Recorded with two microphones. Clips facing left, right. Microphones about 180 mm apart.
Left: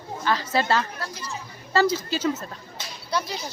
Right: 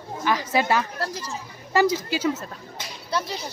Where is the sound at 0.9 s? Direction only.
40° right (ahead or behind).